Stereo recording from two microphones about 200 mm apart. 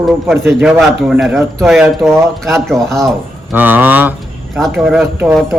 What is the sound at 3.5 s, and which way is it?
Speech, 10° right (ahead or behind).